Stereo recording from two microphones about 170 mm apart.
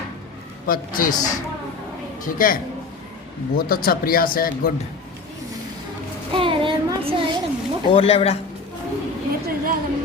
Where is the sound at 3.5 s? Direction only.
60° left (ahead or behind).